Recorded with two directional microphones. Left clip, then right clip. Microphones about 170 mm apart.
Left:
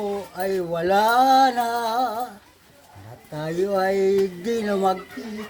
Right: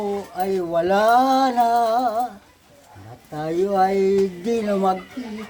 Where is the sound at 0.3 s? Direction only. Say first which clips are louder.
Right 4 dB; 15° right (ahead or behind).